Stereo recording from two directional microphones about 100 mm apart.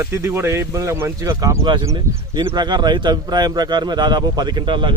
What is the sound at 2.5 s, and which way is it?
Speech, 45° right (ahead or behind).